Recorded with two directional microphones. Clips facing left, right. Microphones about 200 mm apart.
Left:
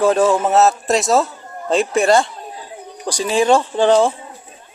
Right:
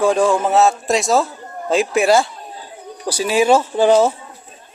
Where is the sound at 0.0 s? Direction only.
Centre (ahead or behind).